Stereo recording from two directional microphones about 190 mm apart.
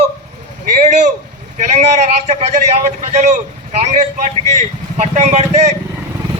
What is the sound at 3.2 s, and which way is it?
A man's voice, 40° right (ahead or behind).